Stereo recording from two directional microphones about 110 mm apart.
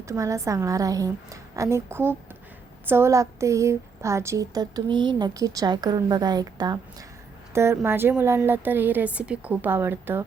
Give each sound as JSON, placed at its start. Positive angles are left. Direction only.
{"t": 0.0, "sound": "a woman's voice", "side_deg": -30}
{"t": 7.5, "sound": "a woman's voice", "side_deg": -25}